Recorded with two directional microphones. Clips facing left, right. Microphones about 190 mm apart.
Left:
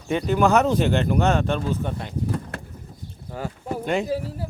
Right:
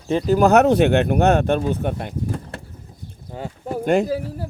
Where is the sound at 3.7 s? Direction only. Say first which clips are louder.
Right 6 dB; 45° right (ahead or behind).